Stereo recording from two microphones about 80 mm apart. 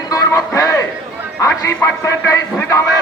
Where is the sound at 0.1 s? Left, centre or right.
Left.